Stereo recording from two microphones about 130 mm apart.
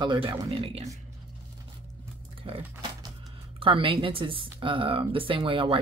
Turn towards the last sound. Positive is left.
turn(degrees=-40)  # may be behind; listen again after turning